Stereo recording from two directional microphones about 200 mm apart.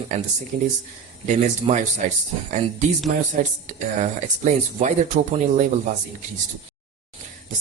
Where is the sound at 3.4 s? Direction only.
40° right (ahead or behind).